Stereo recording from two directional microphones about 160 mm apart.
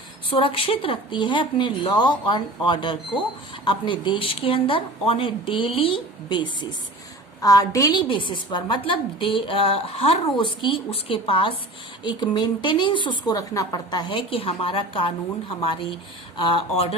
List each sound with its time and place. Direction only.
0.3 s a woman's voice: 35° left (ahead or behind)